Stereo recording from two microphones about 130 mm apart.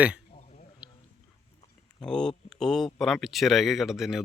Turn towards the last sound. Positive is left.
turn(degrees=-5)  # may be behind; listen again after turning